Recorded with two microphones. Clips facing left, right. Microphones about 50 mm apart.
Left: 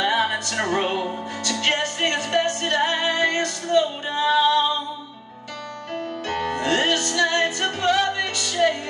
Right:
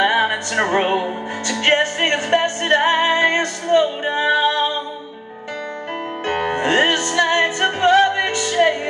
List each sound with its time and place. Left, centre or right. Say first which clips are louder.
0.0 s music: right 5 dB; right
6.2 s music: right 5 dB; right